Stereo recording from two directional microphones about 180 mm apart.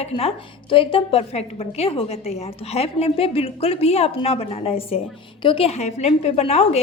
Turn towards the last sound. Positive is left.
turn(degrees=35)  # may be behind; listen again after turning